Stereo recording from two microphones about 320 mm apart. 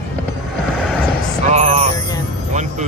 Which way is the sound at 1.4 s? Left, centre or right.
Right.